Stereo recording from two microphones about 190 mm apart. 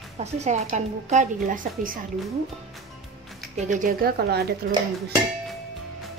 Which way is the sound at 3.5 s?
40° right (ahead or behind).